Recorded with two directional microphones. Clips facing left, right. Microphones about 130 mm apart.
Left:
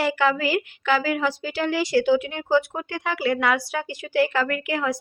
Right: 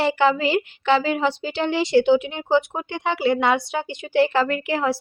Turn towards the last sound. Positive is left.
turn(degrees=-30)  # may be behind; listen again after turning